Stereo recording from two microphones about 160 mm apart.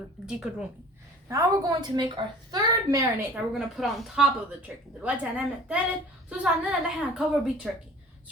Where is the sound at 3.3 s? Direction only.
Centre (ahead or behind).